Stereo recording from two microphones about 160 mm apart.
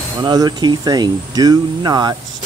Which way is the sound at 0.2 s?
25° right (ahead or behind).